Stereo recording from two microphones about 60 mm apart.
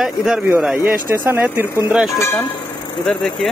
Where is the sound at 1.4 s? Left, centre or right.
Right.